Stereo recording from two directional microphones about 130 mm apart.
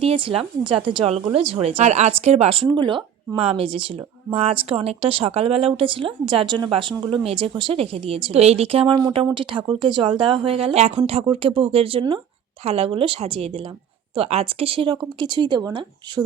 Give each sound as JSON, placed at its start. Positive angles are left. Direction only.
{"t": 0.0, "sound": "speech", "side_deg": -45}
{"t": 1.8, "sound": "speech", "side_deg": -60}
{"t": 2.6, "sound": "speech", "side_deg": -35}